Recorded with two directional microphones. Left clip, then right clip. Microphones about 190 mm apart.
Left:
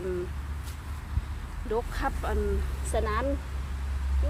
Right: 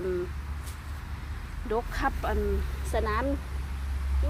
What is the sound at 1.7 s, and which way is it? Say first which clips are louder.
Speech: right 1 dB; 35° right (ahead or behind).